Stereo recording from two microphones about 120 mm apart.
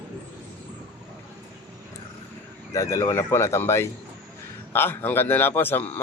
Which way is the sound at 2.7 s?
25° left (ahead or behind).